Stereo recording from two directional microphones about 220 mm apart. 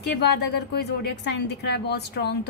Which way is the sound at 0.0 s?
50° left (ahead or behind).